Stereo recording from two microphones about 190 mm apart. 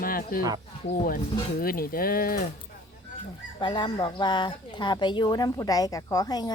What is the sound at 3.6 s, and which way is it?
A woman's voice, 25° left (ahead or behind).